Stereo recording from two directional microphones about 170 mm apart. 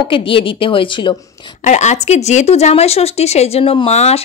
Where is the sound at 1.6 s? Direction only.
45° left (ahead or behind).